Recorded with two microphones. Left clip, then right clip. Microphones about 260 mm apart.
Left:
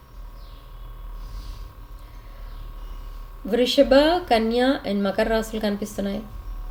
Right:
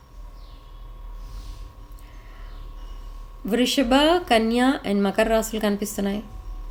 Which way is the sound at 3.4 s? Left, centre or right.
Right.